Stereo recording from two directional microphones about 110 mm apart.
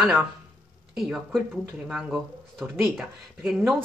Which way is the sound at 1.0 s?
Centre (ahead or behind).